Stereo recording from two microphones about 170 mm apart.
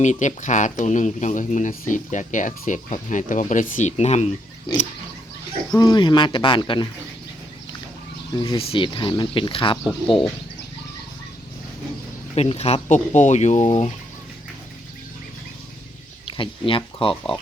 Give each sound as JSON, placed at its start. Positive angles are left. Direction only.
{"t": 0.0, "sound": "speech", "side_deg": 45}
{"t": 5.7, "sound": "speech", "side_deg": 25}
{"t": 8.3, "sound": "speech", "side_deg": 30}
{"t": 12.3, "sound": "speech", "side_deg": 35}
{"t": 16.2, "sound": "speech", "side_deg": 30}